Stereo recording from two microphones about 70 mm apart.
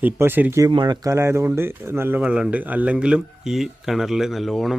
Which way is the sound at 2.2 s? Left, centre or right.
Centre.